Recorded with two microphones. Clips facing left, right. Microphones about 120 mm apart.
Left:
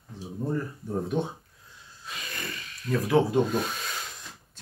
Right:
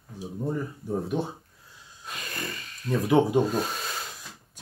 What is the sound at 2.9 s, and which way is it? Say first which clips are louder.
Speech: right 1 dB; 40° right (ahead or behind).